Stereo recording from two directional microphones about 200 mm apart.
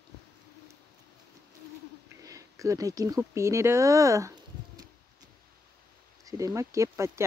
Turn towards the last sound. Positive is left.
turn(degrees=-15)  # may be behind; listen again after turning